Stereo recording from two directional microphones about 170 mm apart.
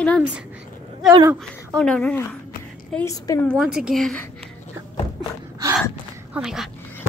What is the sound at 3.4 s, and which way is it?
Speech, centre (ahead or behind).